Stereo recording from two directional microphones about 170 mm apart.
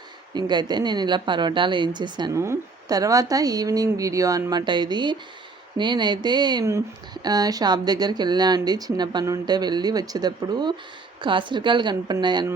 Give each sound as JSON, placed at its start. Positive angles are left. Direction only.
{"t": 0.3, "sound": "speech", "side_deg": -25}